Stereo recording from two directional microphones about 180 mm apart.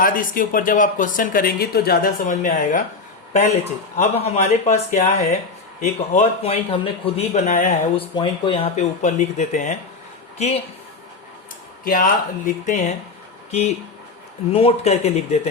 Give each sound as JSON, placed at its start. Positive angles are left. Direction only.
{"t": 0.0, "sound": "speech", "side_deg": 50}
{"t": 8.1, "sound": "a woman's voice", "side_deg": 30}
{"t": 11.9, "sound": "speech", "side_deg": 50}